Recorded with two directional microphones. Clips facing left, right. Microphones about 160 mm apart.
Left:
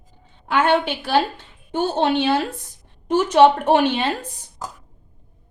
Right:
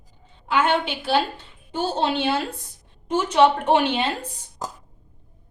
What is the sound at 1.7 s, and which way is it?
A woman's voice, 60° left (ahead or behind).